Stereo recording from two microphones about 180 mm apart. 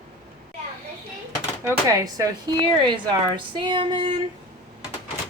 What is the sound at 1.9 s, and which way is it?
A woman's voice, 20° right (ahead or behind).